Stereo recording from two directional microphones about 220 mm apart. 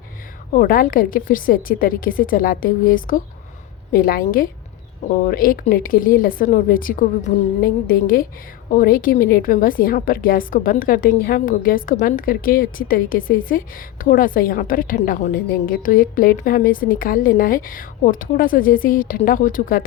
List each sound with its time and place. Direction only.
0.5 s a woman's voice: 40° left (ahead or behind)